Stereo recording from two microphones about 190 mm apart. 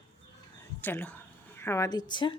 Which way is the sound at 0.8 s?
10° left (ahead or behind).